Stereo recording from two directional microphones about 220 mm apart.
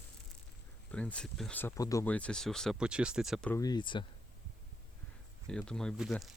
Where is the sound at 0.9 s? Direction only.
5° left (ahead or behind).